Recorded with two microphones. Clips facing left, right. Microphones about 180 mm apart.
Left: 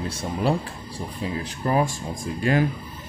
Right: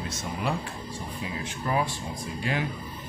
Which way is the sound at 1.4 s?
45° left (ahead or behind).